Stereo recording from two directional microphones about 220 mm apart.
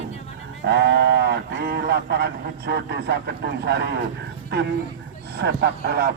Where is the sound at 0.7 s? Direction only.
50° right (ahead or behind).